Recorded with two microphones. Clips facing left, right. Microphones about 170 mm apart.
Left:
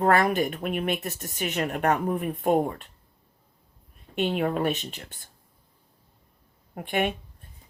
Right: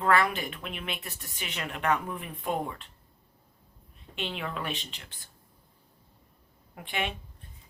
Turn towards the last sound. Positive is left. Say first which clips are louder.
# left 7 dB
turn(degrees=50)  # may be behind; listen again after turning